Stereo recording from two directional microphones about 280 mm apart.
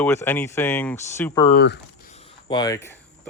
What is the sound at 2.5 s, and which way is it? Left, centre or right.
Speech, centre.